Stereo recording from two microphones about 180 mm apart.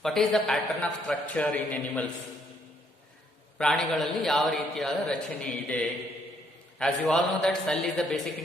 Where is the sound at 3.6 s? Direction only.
Centre (ahead or behind).